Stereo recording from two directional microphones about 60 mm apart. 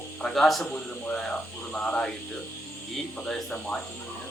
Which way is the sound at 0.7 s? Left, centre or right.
Centre.